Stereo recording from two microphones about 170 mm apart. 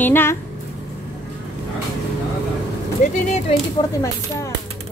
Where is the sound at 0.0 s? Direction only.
15° left (ahead or behind).